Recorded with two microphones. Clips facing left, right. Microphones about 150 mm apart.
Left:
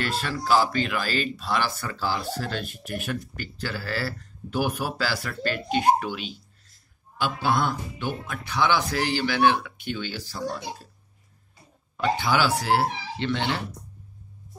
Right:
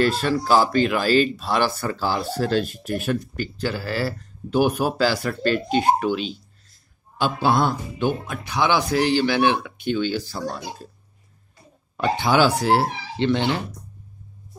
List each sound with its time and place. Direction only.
0.0 s speech: 40° right (ahead or behind)
2.0 s speech: 60° right (ahead or behind)
2.5 s speech: 35° right (ahead or behind)
12.2 s speech: 25° right (ahead or behind)